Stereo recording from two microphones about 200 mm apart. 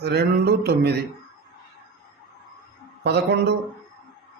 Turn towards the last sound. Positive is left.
turn(degrees=-55)  # may be behind; listen again after turning